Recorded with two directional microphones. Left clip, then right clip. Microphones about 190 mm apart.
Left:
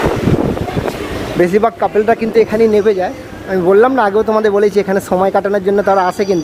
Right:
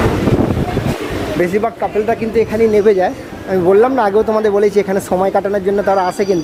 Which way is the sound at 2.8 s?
5° right (ahead or behind).